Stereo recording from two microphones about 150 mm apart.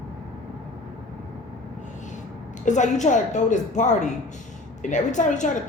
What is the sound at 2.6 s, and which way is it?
A woman's voice, 55° left (ahead or behind).